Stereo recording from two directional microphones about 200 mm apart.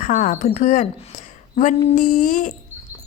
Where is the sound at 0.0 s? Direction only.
40° left (ahead or behind).